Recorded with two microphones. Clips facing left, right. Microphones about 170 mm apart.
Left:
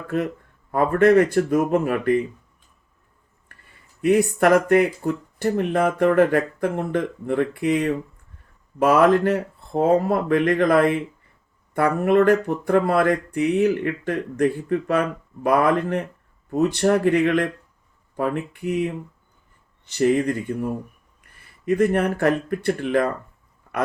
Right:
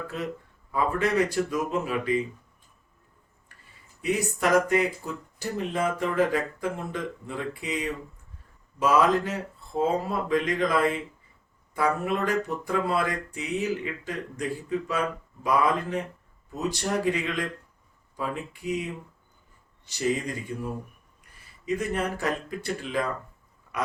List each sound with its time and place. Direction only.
0.1 s speech: 55° left (ahead or behind)
3.5 s a sound: 55° left (ahead or behind)
4.0 s speech: 60° left (ahead or behind)